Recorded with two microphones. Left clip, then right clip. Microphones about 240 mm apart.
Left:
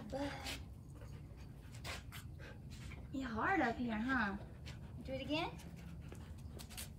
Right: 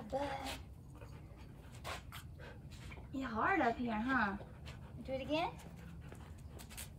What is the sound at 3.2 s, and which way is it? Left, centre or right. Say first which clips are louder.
Speech: right 2 dB; right.